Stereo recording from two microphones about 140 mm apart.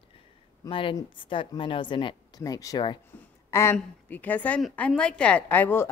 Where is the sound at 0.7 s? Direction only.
40° left (ahead or behind).